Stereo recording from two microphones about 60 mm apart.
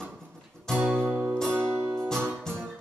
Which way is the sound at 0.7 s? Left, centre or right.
Centre.